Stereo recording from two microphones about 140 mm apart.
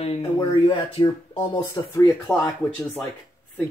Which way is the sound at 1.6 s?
20° left (ahead or behind).